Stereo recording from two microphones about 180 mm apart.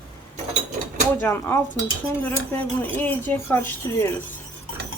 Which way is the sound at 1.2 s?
10° left (ahead or behind).